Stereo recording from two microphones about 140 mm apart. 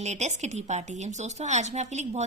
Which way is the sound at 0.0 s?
55° right (ahead or behind).